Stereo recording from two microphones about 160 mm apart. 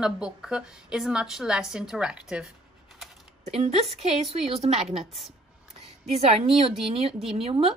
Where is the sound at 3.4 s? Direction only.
45° right (ahead or behind).